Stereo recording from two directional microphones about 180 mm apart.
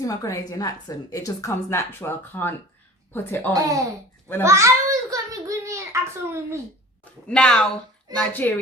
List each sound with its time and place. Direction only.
0.0 s a woman's voice: 20° left (ahead or behind)
3.5 s speech: 20° right (ahead or behind)
4.4 s a sound: 15° right (ahead or behind)
7.0 s a woman's voice: 5° left (ahead or behind)